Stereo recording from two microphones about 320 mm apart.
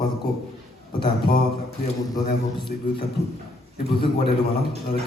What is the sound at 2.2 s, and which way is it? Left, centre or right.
Speech, left.